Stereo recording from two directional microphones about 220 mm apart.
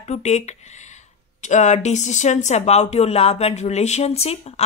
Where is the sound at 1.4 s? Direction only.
35° left (ahead or behind).